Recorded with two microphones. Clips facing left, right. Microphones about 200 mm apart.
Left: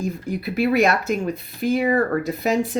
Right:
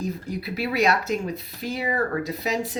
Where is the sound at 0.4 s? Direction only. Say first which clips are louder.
Left 5 dB; 50° left (ahead or behind).